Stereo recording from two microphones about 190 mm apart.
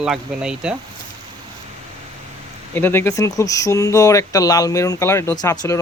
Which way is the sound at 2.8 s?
10° left (ahead or behind).